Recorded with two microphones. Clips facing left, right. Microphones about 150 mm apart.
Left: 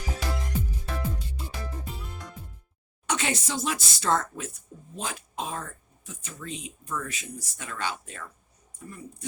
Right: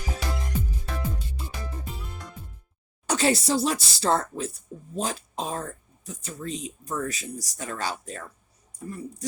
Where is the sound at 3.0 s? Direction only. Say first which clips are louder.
Right 6 dB; 35° right (ahead or behind).